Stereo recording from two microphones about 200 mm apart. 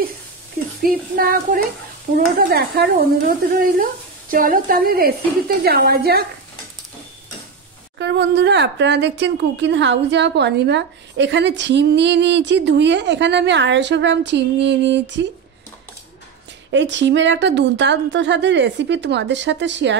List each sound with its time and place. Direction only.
0.8 s speech: 45° right (ahead or behind)
8.0 s speech: 60° right (ahead or behind)
16.7 s speech: 65° right (ahead or behind)